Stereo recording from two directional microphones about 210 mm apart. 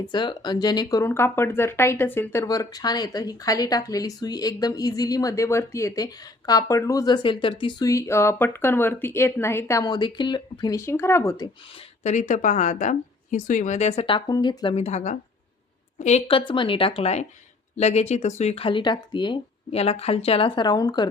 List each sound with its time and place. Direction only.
0.1 s speech: 20° left (ahead or behind)
11.7 s speech: 30° left (ahead or behind)